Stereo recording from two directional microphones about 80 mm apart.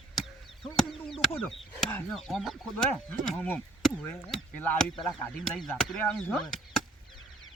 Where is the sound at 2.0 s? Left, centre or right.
Centre.